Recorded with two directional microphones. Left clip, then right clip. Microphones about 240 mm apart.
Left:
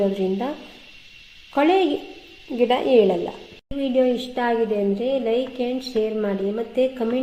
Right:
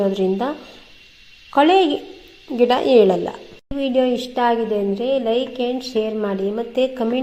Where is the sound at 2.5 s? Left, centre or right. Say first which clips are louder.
Right 3 dB; right.